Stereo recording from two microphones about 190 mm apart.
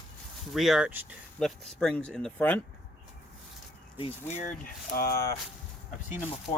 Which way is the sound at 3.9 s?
30° left (ahead or behind).